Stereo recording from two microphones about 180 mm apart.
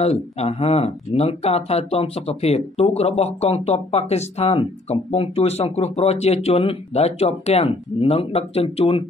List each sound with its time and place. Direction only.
0.0 s speech: 35° left (ahead or behind)